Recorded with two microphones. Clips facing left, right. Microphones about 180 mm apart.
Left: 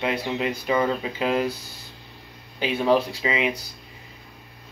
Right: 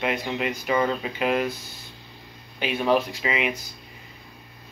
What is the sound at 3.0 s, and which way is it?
Speech, 30° left (ahead or behind).